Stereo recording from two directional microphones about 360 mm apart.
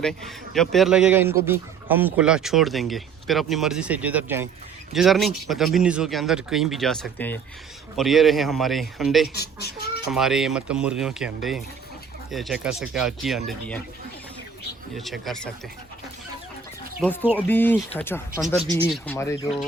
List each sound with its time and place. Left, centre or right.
0.0 s a man's voice: centre
9.3 s a child's voice: left
10.1 s a man's voice: centre
14.9 s a man's voice: centre
17.0 s a man's voice: centre